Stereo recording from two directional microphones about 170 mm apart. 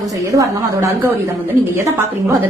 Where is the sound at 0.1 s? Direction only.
20° right (ahead or behind).